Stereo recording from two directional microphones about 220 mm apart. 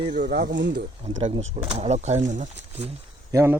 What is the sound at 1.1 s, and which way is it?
Speech, 30° right (ahead or behind).